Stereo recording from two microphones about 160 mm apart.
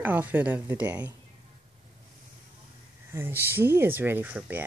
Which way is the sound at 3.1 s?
15° right (ahead or behind).